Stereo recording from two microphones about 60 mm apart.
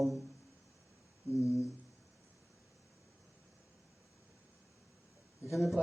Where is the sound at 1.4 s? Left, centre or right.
Left.